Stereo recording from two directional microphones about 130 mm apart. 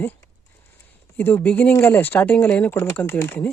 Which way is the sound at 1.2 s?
15° left (ahead or behind).